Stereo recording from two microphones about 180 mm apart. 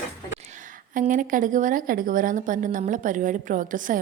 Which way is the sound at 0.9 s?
45° right (ahead or behind).